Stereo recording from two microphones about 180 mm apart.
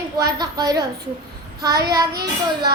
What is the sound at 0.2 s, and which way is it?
Child singing, 20° right (ahead or behind).